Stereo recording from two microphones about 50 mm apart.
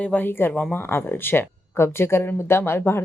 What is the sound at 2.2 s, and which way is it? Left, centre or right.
Speech, left.